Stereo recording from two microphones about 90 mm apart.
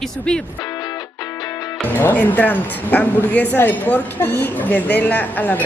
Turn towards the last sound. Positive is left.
turn(degrees=20)  # may be behind; listen again after turning